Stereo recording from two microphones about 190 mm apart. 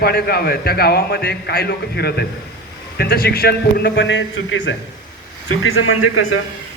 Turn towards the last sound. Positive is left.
turn(degrees=90)